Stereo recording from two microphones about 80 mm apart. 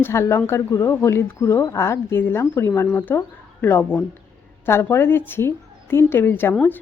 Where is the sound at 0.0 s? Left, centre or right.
Left.